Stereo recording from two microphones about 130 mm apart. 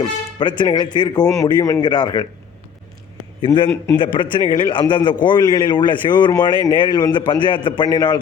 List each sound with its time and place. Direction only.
0.0 s a man's voice: 35° left (ahead or behind)
3.4 s a man's voice: 40° left (ahead or behind)